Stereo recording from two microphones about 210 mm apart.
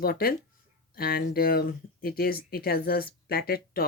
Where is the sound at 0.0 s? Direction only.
45° left (ahead or behind).